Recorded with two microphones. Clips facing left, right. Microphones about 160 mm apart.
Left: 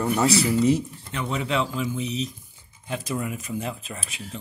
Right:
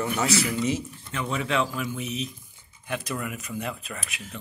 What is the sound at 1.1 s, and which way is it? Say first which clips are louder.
Speech: left 1 dB; 20° left (ahead or behind).